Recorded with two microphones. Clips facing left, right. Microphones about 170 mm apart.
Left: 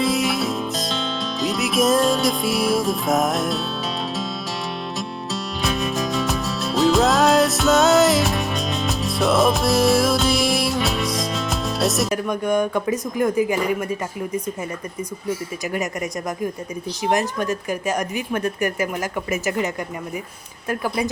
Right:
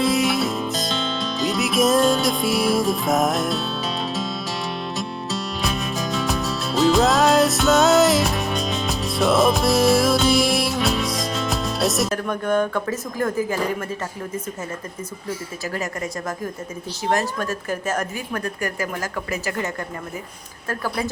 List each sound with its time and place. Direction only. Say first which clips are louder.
0.0 s music: right 1 dB; centre (ahead or behind)
4.9 s music: right 1 dB; centre (ahead or behind)
12.1 s a woman's voice: left 1 dB; 15° left (ahead or behind)
15.7 s a woman's voice: left 2 dB; 15° left (ahead or behind)